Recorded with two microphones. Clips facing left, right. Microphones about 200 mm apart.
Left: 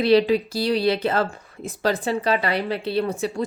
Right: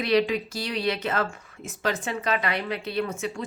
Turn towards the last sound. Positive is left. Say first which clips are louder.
# left 5 dB
turn(degrees=35)  # may be behind; listen again after turning